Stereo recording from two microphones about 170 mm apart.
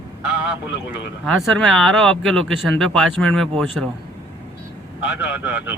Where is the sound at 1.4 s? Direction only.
5° left (ahead or behind).